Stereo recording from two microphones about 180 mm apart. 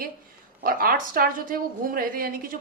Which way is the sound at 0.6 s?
55° right (ahead or behind).